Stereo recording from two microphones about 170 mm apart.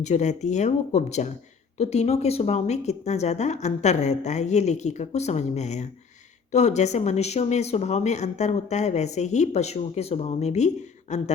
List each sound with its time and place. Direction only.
0.0 s speech: 45° left (ahead or behind)